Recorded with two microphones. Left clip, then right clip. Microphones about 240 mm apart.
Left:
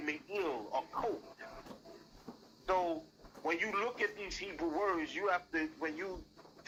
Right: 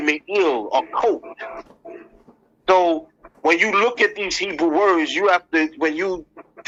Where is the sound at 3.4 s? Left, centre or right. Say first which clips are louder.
Right 19 dB; right.